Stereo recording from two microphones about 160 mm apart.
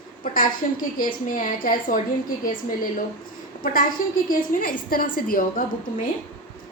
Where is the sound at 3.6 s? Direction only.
60° left (ahead or behind).